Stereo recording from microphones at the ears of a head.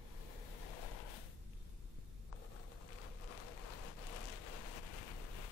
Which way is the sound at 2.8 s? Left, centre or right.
Left.